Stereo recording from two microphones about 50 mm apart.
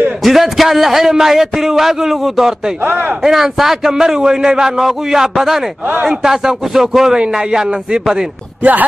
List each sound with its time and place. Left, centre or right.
0.2 s a man's voice: centre
2.8 s speech: right
3.3 s a man's voice: centre